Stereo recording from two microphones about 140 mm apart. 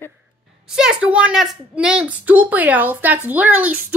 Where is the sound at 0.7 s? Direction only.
5° right (ahead or behind).